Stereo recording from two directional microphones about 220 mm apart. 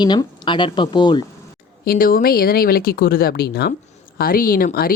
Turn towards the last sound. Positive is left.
turn(degrees=40)  # may be behind; listen again after turning